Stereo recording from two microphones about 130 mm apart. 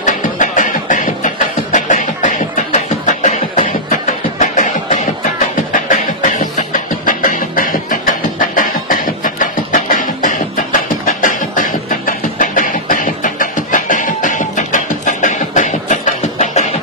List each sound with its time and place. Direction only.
0.0 s music: 80° left
5.7 s beatboxing: 80° left